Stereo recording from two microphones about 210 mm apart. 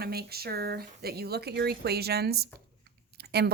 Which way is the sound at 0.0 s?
50° right (ahead or behind).